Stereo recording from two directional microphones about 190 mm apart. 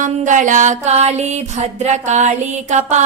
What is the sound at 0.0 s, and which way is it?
Music, 40° right (ahead or behind).